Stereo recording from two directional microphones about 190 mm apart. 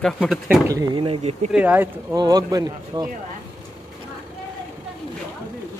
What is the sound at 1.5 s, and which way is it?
Speech, 10° right (ahead or behind).